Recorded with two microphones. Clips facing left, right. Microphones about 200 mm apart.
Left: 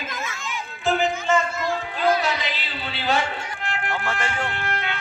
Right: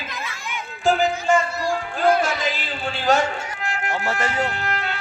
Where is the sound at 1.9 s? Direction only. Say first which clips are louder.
Right 3 dB; 50° right (ahead or behind).